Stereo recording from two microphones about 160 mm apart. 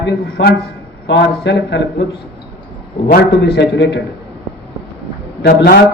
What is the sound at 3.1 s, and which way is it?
Speech, 90° left.